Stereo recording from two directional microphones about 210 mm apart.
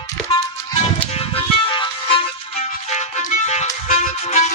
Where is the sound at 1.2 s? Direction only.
25° left (ahead or behind).